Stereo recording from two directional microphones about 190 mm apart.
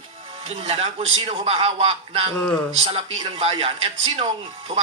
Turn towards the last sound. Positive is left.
turn(degrees=-30)  # may be behind; listen again after turning